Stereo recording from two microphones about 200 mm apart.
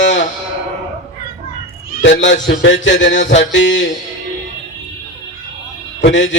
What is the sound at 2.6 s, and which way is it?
Mantra, 65° left (ahead or behind).